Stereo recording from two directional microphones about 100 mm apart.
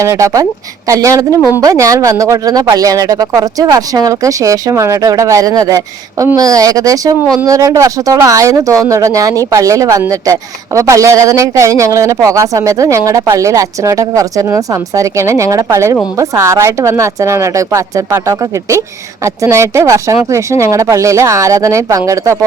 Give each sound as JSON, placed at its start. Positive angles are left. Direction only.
{"t": 0.0, "sound": "a woman's voice", "side_deg": -30}